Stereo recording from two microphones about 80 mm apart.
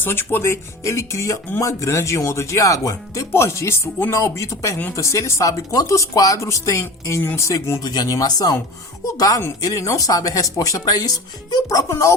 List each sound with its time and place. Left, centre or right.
0.0 s speech: left
11.9 s speech: left